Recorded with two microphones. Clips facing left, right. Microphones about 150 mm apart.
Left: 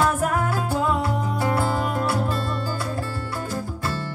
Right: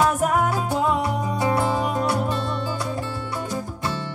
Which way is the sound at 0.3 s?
20° right (ahead or behind).